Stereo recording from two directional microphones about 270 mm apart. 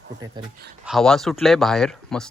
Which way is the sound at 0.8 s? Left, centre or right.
Centre.